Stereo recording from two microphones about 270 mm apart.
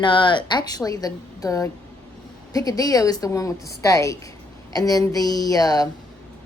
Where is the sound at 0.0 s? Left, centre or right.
Centre.